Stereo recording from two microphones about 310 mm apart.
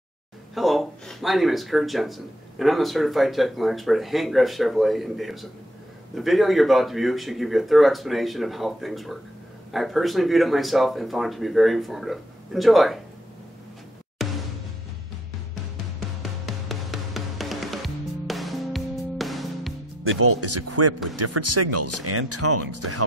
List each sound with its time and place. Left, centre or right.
0.6 s speech: centre
14.2 s music: centre
16.2 s music: centre
20.0 s speech: right